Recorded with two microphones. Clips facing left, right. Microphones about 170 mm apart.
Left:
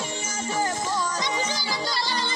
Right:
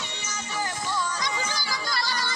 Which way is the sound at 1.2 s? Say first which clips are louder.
Left 3 dB; 20° left (ahead or behind).